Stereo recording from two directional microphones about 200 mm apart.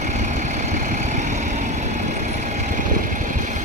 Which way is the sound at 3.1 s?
40° right (ahead or behind).